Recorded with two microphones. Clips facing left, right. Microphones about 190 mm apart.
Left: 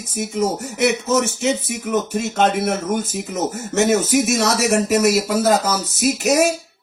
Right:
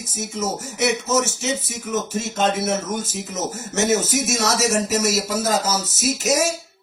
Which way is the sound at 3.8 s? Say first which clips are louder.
Left 3 dB; 60° left (ahead or behind).